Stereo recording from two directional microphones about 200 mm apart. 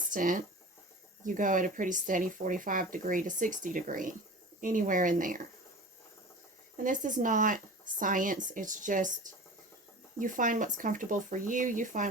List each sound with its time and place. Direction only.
0.1 s speech: 40° right (ahead or behind)
6.8 s speech: 40° right (ahead or behind)